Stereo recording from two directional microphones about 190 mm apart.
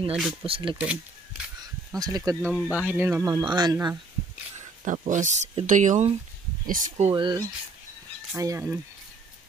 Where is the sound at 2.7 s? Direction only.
10° right (ahead or behind).